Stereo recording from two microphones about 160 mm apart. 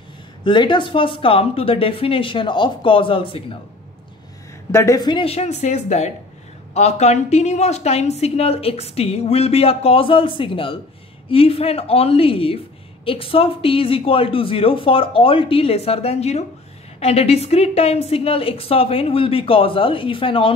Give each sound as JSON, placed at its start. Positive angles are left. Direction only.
{"t": 0.4, "sound": "a woman's voice", "side_deg": 30}
{"t": 4.7, "sound": "a woman's voice", "side_deg": 20}